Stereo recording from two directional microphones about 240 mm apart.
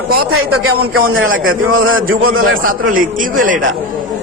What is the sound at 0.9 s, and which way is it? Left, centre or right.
A man's voice, right.